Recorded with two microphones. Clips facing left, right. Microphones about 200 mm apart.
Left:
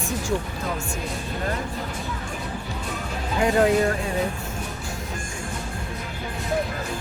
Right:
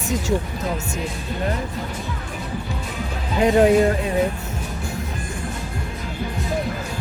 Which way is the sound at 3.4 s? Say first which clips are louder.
Right 5 dB; 20° right (ahead or behind).